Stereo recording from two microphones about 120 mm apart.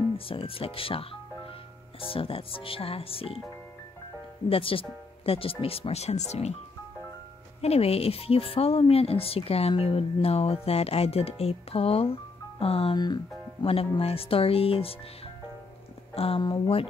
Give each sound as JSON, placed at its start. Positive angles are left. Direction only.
{"t": 0.3, "sound": "speech", "side_deg": 50}
{"t": 4.5, "sound": "speech", "side_deg": 50}
{"t": 7.6, "sound": "speech", "side_deg": 55}
{"t": 12.9, "sound": "speech", "side_deg": 35}
{"t": 13.7, "sound": "speech", "side_deg": 55}
{"t": 16.2, "sound": "speech", "side_deg": 55}